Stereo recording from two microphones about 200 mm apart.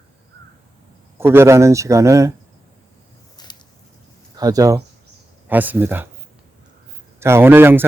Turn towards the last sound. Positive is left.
turn(degrees=-10)  # may be behind; listen again after turning